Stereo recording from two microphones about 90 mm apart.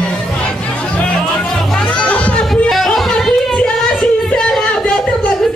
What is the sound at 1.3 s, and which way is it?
Music, 10° left (ahead or behind).